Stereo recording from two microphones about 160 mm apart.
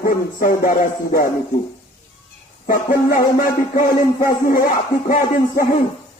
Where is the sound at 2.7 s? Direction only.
60° left (ahead or behind).